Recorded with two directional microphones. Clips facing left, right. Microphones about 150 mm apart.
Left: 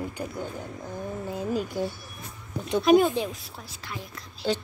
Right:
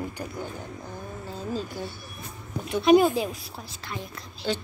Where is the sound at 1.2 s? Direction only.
15° left (ahead or behind).